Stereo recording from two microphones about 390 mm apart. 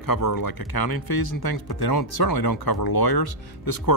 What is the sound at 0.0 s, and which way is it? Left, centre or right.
Speech, left.